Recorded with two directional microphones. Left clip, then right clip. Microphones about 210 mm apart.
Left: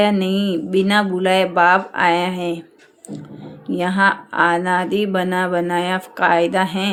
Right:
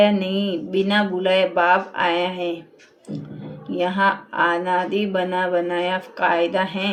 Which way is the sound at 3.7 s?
50° left (ahead or behind).